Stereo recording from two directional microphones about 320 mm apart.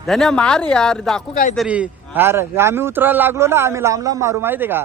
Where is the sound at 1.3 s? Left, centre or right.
Left.